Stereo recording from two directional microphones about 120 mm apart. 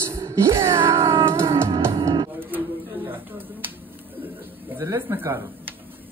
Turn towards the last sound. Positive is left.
turn(degrees=-20)  # may be behind; listen again after turning